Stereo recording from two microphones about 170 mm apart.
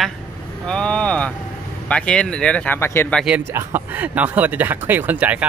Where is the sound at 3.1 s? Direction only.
5° right (ahead or behind).